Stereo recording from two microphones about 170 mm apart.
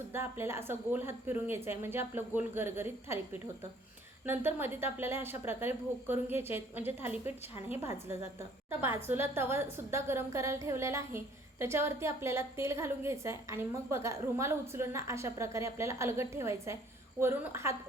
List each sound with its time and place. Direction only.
0.1 s a woman's voice: 15° right (ahead or behind)
4.3 s a woman's voice: 10° right (ahead or behind)